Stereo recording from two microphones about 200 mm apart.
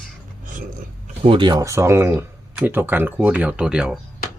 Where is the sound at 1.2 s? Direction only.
25° right (ahead or behind); by 3.9 s 5° right (ahead or behind).